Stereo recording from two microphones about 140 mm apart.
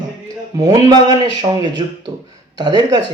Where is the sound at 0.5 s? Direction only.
25° right (ahead or behind).